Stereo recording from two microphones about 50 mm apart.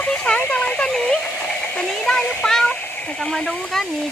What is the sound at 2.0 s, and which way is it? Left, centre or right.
Speech, centre.